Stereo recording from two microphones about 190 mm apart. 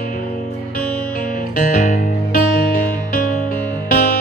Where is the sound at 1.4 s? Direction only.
45° left (ahead or behind).